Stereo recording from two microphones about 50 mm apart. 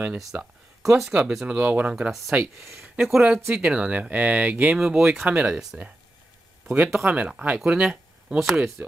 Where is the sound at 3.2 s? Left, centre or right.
Centre.